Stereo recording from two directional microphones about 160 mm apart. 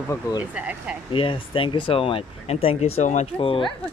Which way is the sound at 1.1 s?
30° left (ahead or behind).